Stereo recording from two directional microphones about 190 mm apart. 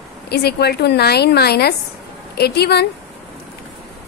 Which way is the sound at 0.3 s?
55° left (ahead or behind).